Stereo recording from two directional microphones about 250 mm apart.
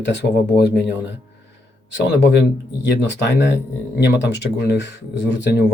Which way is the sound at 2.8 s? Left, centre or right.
Left.